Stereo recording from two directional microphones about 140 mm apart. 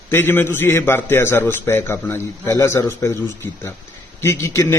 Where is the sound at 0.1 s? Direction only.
15° left (ahead or behind).